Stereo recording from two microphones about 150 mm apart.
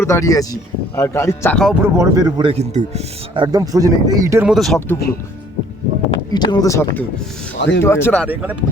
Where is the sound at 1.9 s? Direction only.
25° right (ahead or behind).